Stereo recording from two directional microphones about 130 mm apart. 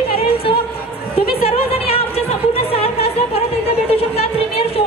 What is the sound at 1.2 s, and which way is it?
Music, 50° left (ahead or behind).